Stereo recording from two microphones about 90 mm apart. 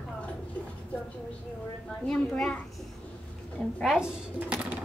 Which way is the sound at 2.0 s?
10° left (ahead or behind).